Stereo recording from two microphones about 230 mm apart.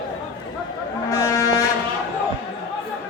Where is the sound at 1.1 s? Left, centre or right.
Centre.